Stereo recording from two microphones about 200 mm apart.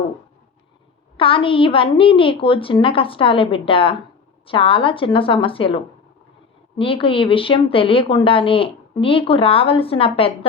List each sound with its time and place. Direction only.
1.1 s speech: 25° left (ahead or behind)